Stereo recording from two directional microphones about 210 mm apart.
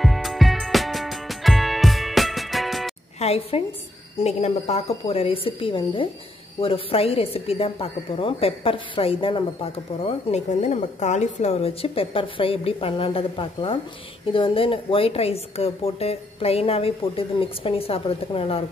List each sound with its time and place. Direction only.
0.0 s music: centre (ahead or behind)
3.2 s a woman's voice: 30° left (ahead or behind)